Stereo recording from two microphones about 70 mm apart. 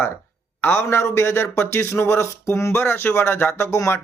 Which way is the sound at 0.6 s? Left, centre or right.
Left.